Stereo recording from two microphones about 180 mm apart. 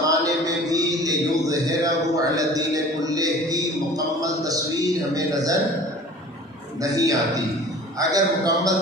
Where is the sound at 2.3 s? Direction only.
20° right (ahead or behind).